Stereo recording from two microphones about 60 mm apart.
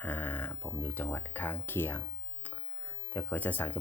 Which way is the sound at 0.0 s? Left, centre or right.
Left.